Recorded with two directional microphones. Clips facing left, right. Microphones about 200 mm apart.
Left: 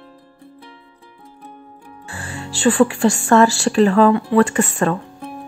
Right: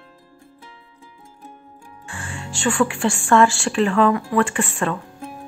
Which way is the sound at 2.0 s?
35° left (ahead or behind).